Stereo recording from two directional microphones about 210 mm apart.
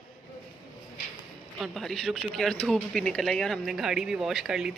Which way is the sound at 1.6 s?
Centre (ahead or behind).